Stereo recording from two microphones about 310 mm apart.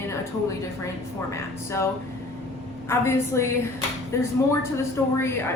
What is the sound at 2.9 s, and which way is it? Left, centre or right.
A woman's voice, centre.